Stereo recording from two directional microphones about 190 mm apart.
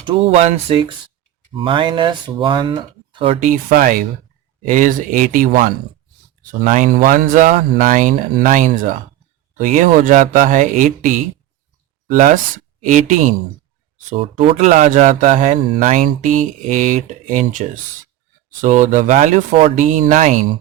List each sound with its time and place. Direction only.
0.0 s speech: 30° right (ahead or behind)
3.4 s speech: 45° right (ahead or behind)
14.1 s speech: 30° right (ahead or behind)
18.6 s speech: 40° right (ahead or behind)